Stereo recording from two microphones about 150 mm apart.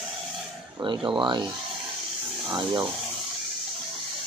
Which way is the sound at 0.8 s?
30° right (ahead or behind).